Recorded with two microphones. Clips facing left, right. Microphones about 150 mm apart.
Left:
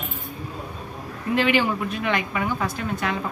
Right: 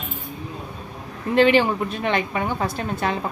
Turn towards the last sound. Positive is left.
turn(degrees=-30)  # may be behind; listen again after turning